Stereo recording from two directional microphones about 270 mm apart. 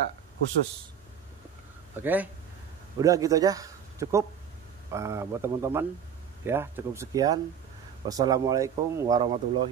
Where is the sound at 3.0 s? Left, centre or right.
Centre.